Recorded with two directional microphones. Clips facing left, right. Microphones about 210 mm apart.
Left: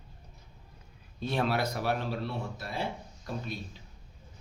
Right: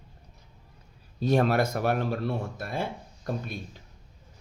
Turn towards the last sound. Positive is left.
turn(degrees=-55)  # may be behind; listen again after turning